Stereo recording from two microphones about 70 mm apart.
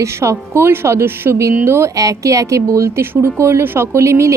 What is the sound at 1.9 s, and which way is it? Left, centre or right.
A woman's voice, right.